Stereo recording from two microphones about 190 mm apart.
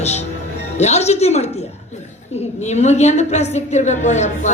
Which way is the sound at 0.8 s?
35° left (ahead or behind).